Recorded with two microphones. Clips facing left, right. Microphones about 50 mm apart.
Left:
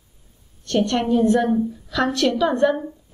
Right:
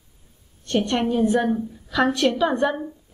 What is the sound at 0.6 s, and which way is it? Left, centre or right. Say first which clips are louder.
A woman's voice: left 1 dB; centre.